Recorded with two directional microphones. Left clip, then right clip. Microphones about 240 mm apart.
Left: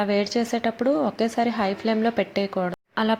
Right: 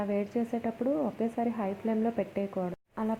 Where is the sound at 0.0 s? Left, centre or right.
Left.